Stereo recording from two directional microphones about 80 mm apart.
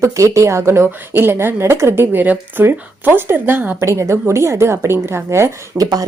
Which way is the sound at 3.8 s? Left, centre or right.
Right.